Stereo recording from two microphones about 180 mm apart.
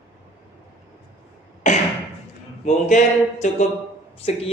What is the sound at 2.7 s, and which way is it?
Speech, 45° left (ahead or behind).